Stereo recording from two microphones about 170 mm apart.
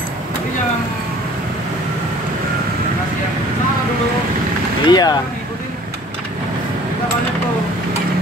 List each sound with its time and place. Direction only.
4.8 s speech: 25° left (ahead or behind)